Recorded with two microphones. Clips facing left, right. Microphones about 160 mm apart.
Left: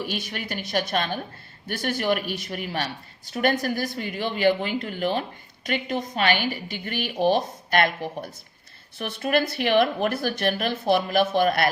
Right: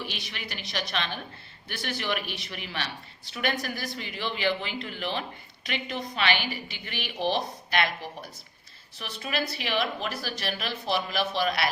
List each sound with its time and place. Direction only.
0.0 s speech: 45° left (ahead or behind)